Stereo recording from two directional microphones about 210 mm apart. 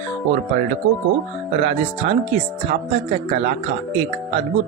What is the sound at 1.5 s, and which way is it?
Speech, 30° right (ahead or behind).